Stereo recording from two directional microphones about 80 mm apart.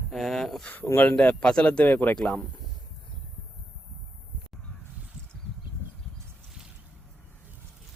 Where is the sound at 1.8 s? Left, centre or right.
Left.